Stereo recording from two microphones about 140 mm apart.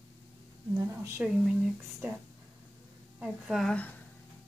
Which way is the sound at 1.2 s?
10° right (ahead or behind).